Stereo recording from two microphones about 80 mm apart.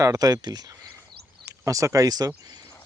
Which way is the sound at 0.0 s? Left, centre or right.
Right.